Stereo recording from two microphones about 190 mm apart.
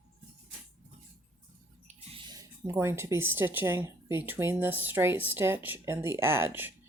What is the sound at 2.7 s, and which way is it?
Speech, 15° right (ahead or behind).